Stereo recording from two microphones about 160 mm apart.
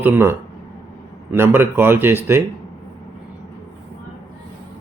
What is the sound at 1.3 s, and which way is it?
Speech, 15° right (ahead or behind).